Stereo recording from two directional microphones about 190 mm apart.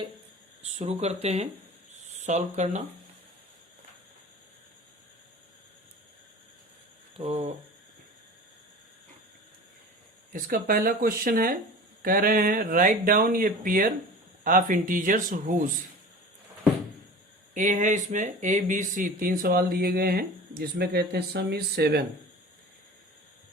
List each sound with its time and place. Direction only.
0.6 s speech: 35° right (ahead or behind)
7.2 s speech: 35° right (ahead or behind)
10.3 s speech: 50° right (ahead or behind)
17.5 s speech: 40° right (ahead or behind); by 22.0 s 60° right (ahead or behind)